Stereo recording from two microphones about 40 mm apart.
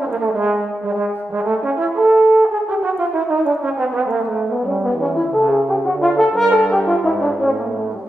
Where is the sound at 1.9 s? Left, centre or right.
Centre.